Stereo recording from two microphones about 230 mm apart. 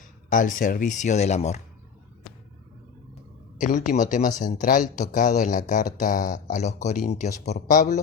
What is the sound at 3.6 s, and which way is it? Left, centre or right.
Speech, left.